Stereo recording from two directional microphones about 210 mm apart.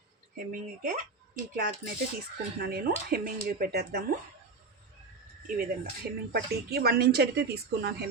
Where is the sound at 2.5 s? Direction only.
45° right (ahead or behind).